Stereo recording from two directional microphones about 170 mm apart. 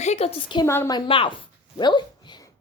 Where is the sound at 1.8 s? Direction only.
25° left (ahead or behind).